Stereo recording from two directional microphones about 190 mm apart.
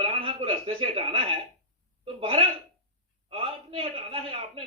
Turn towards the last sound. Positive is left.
turn(degrees=-30)  # may be behind; listen again after turning